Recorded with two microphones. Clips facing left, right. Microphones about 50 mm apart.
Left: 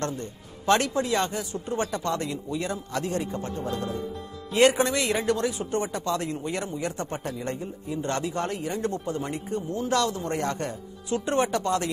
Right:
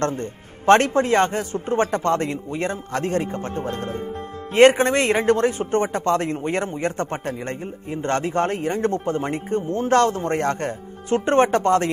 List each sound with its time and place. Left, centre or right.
0.0 s a man's voice: right